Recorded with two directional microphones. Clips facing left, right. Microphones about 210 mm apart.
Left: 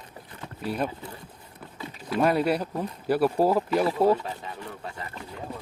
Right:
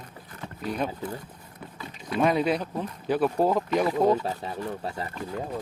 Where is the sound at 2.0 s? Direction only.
5° left (ahead or behind).